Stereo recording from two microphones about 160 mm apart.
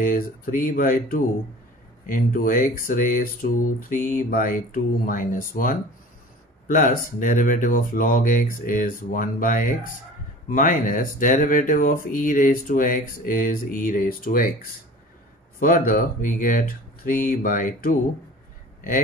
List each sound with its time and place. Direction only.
0.0 s speech: 60° left (ahead or behind)
15.6 s speech: 60° left (ahead or behind)